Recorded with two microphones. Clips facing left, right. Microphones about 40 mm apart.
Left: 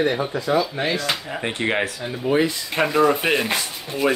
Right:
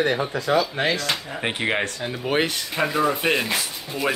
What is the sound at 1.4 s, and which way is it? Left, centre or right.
Speech, centre.